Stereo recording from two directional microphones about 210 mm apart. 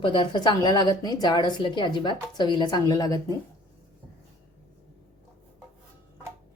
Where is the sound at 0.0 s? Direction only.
25° left (ahead or behind).